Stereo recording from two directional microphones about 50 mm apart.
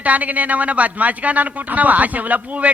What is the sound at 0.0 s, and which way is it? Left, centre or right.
Speech, right.